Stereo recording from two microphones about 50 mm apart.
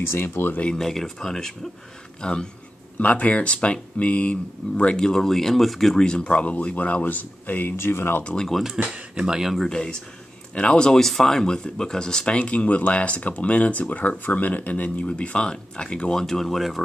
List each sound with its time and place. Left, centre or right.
0.0 s speech: left
0.7 s speech: centre
5.9 s speech: centre; by 7.7 s left
7.7 s speech: left
8.2 s speech: centre
8.8 s speech: centre
9.6 s speech: centre
12.4 s speech: left; by 16.8 s centre